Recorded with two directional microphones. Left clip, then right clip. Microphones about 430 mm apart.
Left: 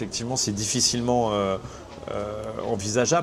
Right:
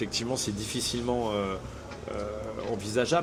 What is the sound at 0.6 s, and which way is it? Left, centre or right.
Speech, left.